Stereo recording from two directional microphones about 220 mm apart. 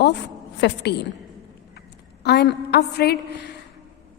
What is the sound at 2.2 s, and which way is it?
A woman's voice, 50° left (ahead or behind).